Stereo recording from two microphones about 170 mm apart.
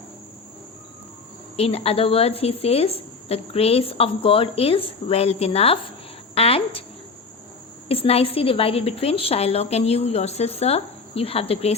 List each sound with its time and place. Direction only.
1.5 s a woman's voice: 35° left (ahead or behind)
7.9 s a woman's voice: 35° left (ahead or behind)